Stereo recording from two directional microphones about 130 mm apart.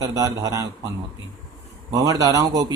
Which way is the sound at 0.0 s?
25° right (ahead or behind).